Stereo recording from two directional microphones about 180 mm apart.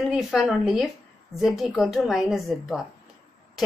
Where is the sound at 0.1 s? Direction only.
Centre (ahead or behind).